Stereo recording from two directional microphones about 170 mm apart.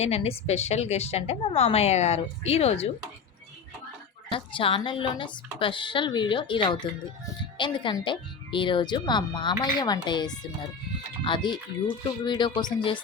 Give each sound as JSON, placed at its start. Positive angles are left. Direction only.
{"t": 0.0, "sound": "a woman's voice", "side_deg": 40}
{"t": 4.3, "sound": "speech", "side_deg": 30}